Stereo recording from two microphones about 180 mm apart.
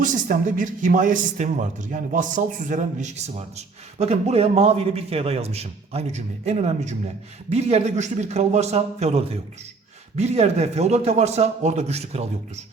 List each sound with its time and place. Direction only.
0.0 s a man's voice: 45° right (ahead or behind)